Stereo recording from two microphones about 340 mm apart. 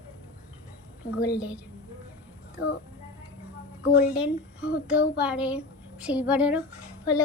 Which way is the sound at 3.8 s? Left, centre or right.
Centre.